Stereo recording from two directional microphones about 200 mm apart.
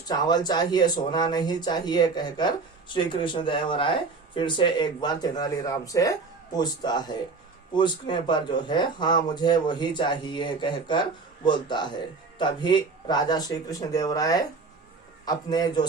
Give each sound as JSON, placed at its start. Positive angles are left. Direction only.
{"t": 0.1, "sound": "speech", "side_deg": 20}